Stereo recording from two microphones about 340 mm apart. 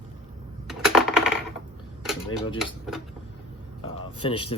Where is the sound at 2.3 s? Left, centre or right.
Centre.